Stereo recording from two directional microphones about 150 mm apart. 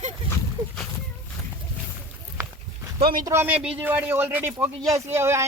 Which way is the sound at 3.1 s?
20° right (ahead or behind).